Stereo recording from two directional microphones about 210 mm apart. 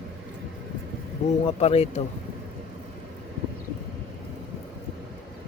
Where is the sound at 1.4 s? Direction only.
30° left (ahead or behind).